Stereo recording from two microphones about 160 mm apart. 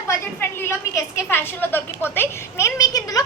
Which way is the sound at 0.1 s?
15° left (ahead or behind).